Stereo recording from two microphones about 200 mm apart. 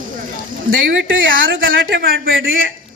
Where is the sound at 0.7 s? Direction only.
75° right (ahead or behind).